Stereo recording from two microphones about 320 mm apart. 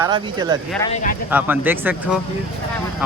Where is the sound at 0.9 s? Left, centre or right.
Left.